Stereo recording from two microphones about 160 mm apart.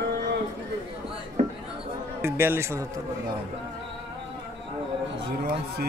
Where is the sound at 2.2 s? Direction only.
15° right (ahead or behind).